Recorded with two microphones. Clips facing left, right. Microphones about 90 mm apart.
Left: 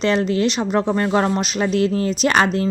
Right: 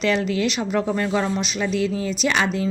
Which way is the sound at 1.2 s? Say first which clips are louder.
Left 4 dB; 55° left (ahead or behind).